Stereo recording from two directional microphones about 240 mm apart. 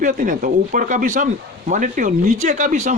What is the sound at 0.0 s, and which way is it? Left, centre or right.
Speech, right.